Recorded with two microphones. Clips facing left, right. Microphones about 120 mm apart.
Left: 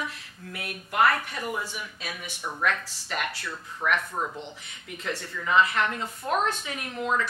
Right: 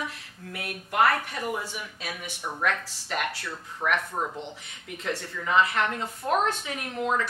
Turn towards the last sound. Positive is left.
turn(degrees=-40)  # may be behind; listen again after turning